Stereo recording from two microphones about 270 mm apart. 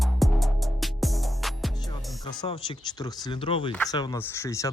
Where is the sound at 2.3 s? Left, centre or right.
Centre.